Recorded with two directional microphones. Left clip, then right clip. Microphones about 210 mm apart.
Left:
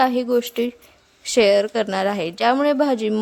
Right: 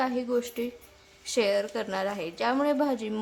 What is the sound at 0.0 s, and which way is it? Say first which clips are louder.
A woman's voice: left 10 dB; 40° left (ahead or behind).